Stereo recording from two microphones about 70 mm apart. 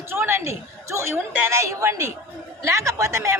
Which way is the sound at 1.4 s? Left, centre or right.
Right.